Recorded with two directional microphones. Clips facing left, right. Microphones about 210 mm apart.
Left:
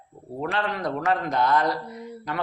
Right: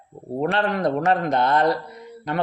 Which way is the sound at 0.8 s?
25° right (ahead or behind).